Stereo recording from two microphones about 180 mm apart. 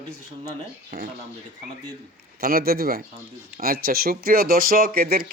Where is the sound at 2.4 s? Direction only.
55° right (ahead or behind).